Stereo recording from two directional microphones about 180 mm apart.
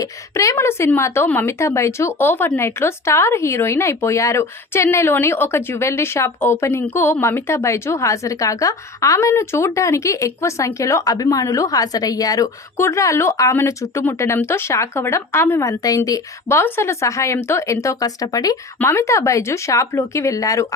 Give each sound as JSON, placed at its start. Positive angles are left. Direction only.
{"t": 0.0, "sound": "a woman's voice", "side_deg": 15}